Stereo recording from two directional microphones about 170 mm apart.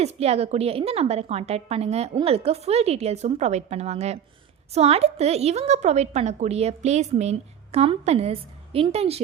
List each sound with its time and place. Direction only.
0.0 s a woman's voice: 40° right (ahead or behind)